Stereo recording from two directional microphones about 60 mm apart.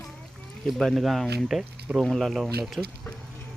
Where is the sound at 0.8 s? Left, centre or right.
Centre.